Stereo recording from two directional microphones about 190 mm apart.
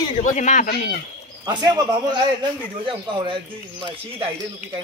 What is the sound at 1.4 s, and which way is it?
Speech, 20° right (ahead or behind).